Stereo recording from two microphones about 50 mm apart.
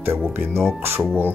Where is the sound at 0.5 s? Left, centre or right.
Centre.